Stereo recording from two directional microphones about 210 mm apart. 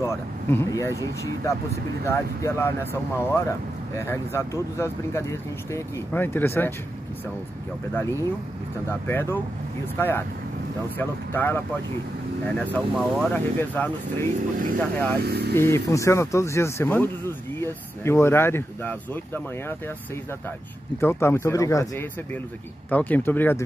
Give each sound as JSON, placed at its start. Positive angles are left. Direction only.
{"t": 0.0, "sound": "speech", "side_deg": 10}
{"t": 7.9, "sound": "speech", "side_deg": 15}
{"t": 15.2, "sound": "speech", "side_deg": -50}
{"t": 15.5, "sound": "speech", "side_deg": 10}
{"t": 21.0, "sound": "speech", "side_deg": 10}